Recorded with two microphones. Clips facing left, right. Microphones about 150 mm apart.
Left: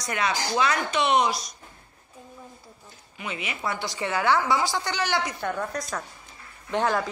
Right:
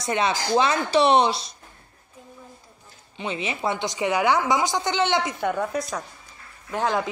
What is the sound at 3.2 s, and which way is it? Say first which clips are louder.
A man's voice: right 5 dB; 25° right (ahead or behind).